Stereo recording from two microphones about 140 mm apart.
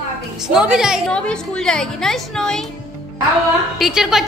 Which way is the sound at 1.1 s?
5° left (ahead or behind).